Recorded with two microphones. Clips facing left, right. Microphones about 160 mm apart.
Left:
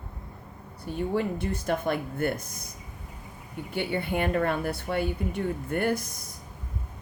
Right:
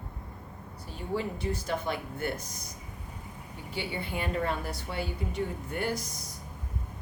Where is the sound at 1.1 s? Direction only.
55° left (ahead or behind).